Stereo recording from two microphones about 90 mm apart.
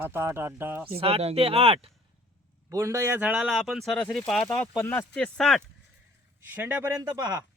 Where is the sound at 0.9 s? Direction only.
90° right.